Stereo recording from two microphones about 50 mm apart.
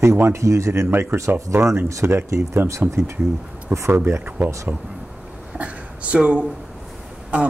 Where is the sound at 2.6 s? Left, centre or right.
Right.